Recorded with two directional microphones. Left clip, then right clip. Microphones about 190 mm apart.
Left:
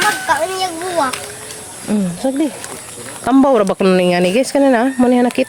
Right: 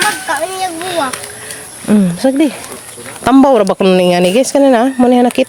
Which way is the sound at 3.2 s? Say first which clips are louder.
Right 4 dB; 25° right (ahead or behind).